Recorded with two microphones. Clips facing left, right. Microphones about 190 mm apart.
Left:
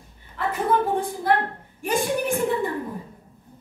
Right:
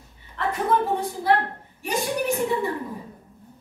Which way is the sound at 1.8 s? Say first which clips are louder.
Left 2 dB; 50° left (ahead or behind).